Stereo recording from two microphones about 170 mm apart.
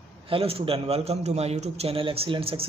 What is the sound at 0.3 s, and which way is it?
A man's voice, 35° right (ahead or behind).